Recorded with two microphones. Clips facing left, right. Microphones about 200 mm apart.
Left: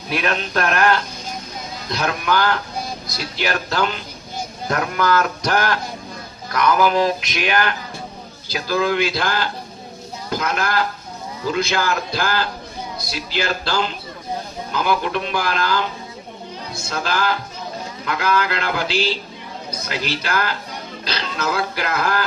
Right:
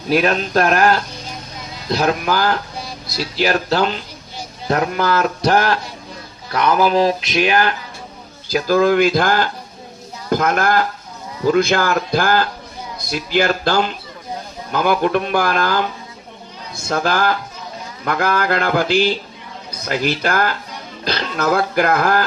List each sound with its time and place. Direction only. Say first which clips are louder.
0.1 s mantra: right 6 dB; 40° right (ahead or behind)
8.5 s speech: right 6 dB; 45° right (ahead or behind)
16.9 s speech: right 5 dB; 50° right (ahead or behind)